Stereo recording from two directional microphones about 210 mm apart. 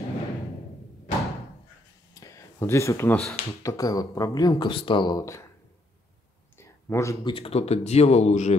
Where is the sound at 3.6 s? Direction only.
15° left (ahead or behind).